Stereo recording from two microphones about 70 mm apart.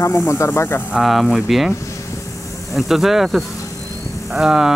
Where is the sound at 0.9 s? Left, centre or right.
Centre.